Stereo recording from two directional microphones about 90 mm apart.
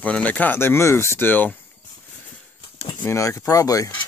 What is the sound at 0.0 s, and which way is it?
Speech, 15° left (ahead or behind).